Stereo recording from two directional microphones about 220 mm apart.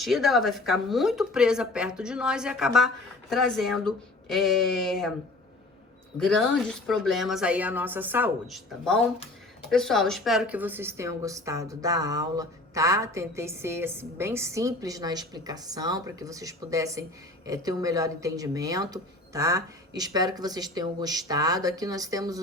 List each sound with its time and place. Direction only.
0.0 s a woman's voice: centre (ahead or behind)
6.1 s a woman's voice: 5° left (ahead or behind); by 22.4 s 15° right (ahead or behind)